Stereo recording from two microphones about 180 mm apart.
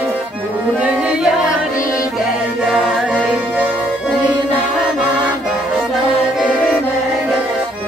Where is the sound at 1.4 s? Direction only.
45° left (ahead or behind).